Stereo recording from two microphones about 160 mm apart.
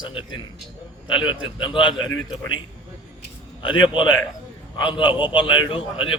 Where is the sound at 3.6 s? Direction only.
30° left (ahead or behind).